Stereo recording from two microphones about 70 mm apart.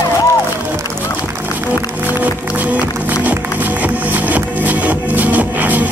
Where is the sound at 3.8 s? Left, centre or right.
Right.